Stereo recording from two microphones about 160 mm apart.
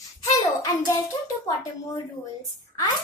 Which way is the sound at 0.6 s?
25° left (ahead or behind).